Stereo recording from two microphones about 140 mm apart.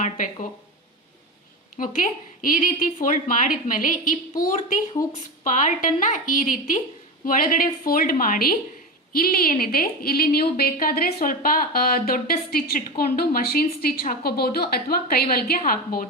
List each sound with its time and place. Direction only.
1.7 s a woman's voice: 75° left (ahead or behind)
5.0 s a woman's voice: 85° left
5.4 s a woman's voice: 65° left (ahead or behind)
7.3 s a woman's voice: 80° left